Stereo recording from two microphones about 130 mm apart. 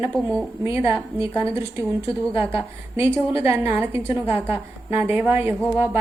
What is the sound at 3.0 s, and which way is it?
A woman's voice, 20° right (ahead or behind).